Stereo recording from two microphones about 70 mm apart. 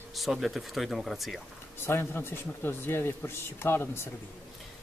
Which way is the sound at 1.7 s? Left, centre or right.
Left.